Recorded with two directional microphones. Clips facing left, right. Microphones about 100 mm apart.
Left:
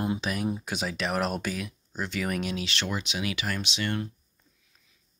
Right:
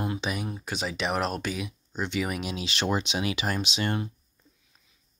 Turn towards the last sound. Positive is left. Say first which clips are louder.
# right 2 dB
turn(degrees=-20)  # may be behind; listen again after turning